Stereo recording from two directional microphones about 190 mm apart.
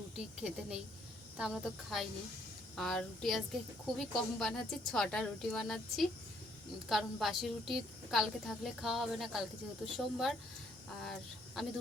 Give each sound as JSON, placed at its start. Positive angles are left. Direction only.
{"t": 0.3, "sound": "a woman's voice", "side_deg": -5}